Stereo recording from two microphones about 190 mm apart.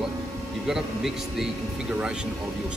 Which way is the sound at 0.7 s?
Centre (ahead or behind).